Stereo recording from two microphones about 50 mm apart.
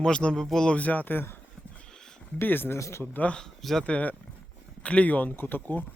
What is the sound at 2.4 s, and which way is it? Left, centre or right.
Speech, left.